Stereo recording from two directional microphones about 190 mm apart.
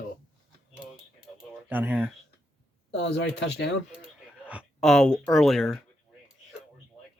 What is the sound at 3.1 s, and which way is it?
Speech, 65° left (ahead or behind).